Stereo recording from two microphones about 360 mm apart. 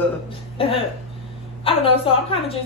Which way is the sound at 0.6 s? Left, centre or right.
Centre.